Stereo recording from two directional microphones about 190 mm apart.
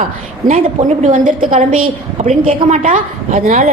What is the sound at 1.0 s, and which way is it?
A woman's voice, 45° right (ahead or behind).